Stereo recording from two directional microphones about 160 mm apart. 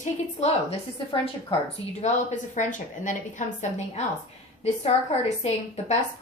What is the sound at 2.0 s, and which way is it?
A woman's voice, 50° left (ahead or behind).